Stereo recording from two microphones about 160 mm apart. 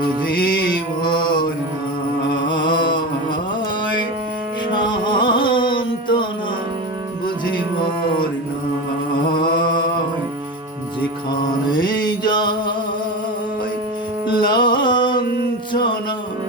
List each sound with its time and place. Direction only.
1.0 s mantra: 30° left (ahead or behind)
2.5 s a sound: 30° left (ahead or behind)
4.7 s music: 30° left (ahead or behind)
11.7 s music: 30° left (ahead or behind)
14.3 s music: 30° left (ahead or behind)